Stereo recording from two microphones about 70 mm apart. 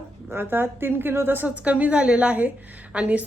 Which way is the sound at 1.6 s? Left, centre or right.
Centre.